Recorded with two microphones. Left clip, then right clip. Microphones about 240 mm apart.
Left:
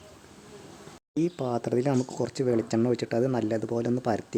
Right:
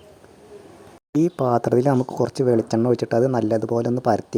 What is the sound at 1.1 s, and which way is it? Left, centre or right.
Speech, centre.